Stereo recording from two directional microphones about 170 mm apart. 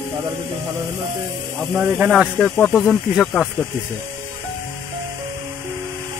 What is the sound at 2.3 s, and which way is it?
Speech, 10° left (ahead or behind).